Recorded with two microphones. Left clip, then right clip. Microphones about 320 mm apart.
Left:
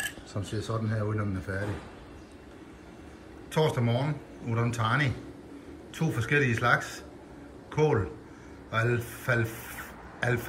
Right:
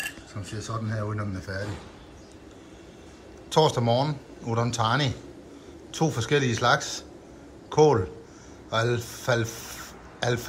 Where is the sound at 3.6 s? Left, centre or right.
Centre.